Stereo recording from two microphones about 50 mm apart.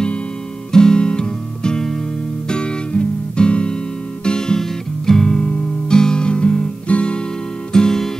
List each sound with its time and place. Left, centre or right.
0.7 s music: centre
6.9 s guitar: left
7.7 s music: centre